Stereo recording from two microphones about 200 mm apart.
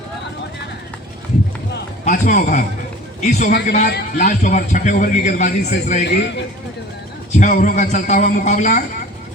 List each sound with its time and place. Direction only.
2.0 s a man's voice: 40° left (ahead or behind)
6.1 s a man's voice: 60° left (ahead or behind)
7.3 s a man's voice: 40° left (ahead or behind)